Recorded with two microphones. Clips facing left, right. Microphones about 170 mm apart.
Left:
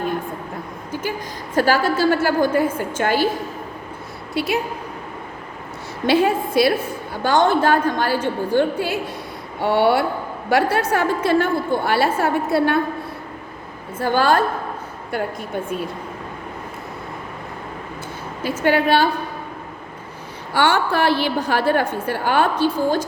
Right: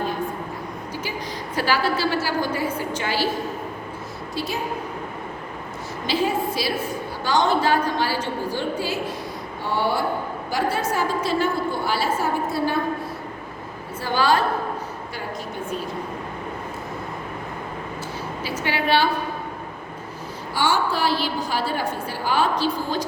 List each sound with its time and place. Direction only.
1.5 s a woman's voice: 45° left (ahead or behind)
4.4 s a woman's voice: 65° left (ahead or behind)
6.1 s a woman's voice: 55° left (ahead or behind)
14.0 s a woman's voice: 50° left (ahead or behind)
18.6 s a woman's voice: 45° left (ahead or behind)
20.5 s a woman's voice: 60° left (ahead or behind)